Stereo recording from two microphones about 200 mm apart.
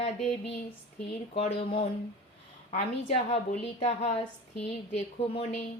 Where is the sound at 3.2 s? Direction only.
35° left (ahead or behind).